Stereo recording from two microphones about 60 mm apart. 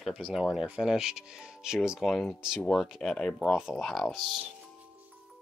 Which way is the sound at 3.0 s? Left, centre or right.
Centre.